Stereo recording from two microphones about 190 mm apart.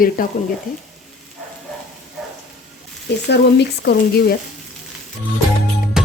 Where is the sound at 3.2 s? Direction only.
65° left (ahead or behind).